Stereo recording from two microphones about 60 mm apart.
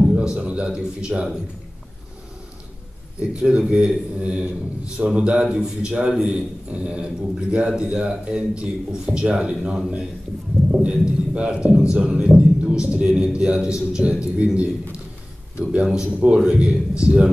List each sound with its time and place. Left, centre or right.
0.1 s a man's voice: centre
3.2 s a man's voice: centre